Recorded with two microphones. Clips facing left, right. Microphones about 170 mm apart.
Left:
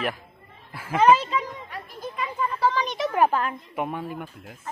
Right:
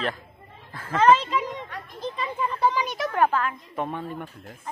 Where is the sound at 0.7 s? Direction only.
10° left (ahead or behind).